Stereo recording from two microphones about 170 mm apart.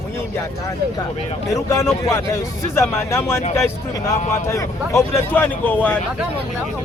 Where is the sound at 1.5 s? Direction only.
15° left (ahead or behind).